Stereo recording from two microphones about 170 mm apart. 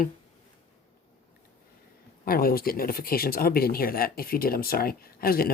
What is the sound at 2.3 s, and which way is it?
Speech, 60° left (ahead or behind).